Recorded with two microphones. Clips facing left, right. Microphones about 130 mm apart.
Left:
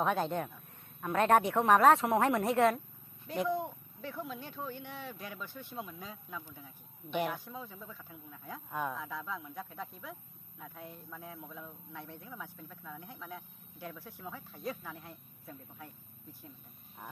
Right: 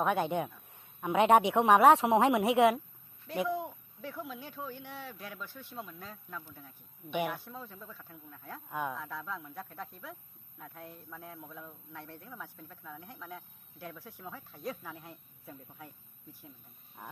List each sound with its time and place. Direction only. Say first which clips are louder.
0.0 s a man's voice: right 2 dB; 5° right (ahead or behind)
3.3 s a man's voice: even; centre (ahead or behind)
17.0 s speech: right 1 dB; 5° left (ahead or behind)